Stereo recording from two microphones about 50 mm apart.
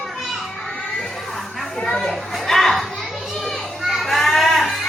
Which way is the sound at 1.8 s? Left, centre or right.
Centre.